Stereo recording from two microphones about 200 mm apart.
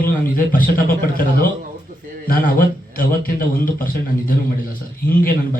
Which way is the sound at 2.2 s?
45° left (ahead or behind).